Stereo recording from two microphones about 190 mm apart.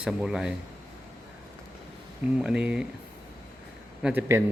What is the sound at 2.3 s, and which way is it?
Speech, 5° right (ahead or behind).